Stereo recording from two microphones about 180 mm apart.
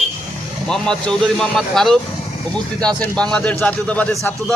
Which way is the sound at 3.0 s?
5° left (ahead or behind).